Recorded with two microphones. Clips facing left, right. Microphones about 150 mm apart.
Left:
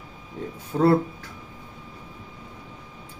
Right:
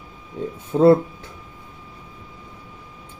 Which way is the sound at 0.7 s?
20° right (ahead or behind).